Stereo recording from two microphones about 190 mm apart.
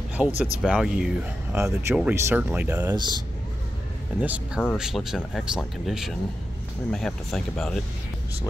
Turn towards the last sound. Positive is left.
turn(degrees=0)  # may be behind; listen again after turning